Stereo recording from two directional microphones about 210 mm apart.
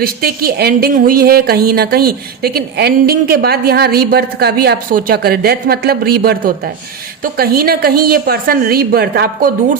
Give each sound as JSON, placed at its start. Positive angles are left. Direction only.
{"t": 0.0, "sound": "speech", "side_deg": -45}